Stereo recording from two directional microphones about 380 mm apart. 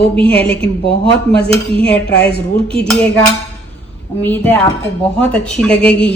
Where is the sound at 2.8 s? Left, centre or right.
Centre.